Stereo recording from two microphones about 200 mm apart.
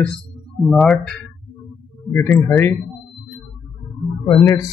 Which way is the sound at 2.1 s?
10° left (ahead or behind).